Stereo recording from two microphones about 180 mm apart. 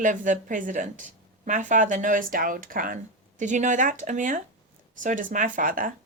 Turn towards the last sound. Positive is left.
turn(degrees=-50)  # may be behind; listen again after turning